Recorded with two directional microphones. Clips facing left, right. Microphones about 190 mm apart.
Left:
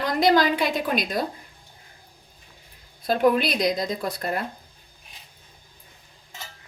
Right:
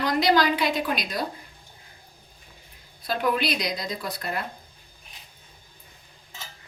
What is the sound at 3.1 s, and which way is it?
A woman's voice, 50° left (ahead or behind).